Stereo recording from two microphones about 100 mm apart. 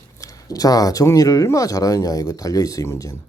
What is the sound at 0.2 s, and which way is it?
Speech, 35° left (ahead or behind).